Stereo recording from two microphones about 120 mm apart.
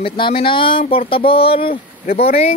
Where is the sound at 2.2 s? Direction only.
60° left (ahead or behind).